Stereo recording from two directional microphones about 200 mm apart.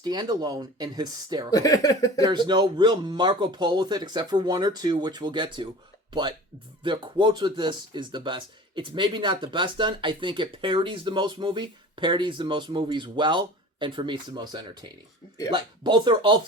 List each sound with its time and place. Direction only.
0.0 s speech: 20° right (ahead or behind)
1.5 s speech: 20° left (ahead or behind)
2.2 s speech: 20° right (ahead or behind)